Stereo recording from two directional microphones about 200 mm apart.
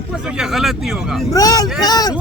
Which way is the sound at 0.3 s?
5° right (ahead or behind).